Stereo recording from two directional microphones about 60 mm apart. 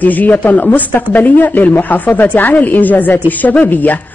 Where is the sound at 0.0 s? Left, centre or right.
Left.